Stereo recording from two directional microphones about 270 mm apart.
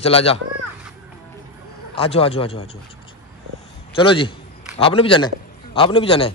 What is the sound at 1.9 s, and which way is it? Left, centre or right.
Speech, left.